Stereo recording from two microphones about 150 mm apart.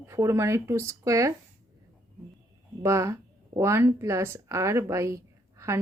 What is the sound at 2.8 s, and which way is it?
Speech, 20° right (ahead or behind).